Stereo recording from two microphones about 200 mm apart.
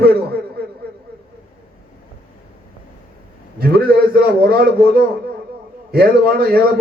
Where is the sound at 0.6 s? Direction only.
50° right (ahead or behind).